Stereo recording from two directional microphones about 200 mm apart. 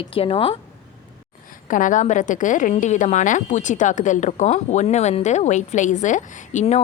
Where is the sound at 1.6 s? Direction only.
40° left (ahead or behind).